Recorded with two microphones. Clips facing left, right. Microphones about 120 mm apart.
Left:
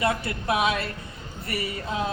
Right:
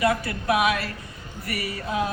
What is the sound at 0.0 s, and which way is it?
A woman's voice, 25° left (ahead or behind).